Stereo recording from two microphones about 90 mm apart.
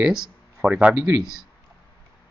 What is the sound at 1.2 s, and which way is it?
Speech, 5° right (ahead or behind).